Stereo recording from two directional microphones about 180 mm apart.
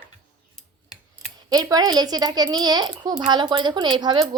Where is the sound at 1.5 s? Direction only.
20° right (ahead or behind).